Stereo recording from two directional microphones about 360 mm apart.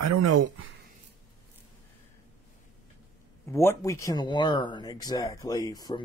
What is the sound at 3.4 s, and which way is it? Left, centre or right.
Speech, centre.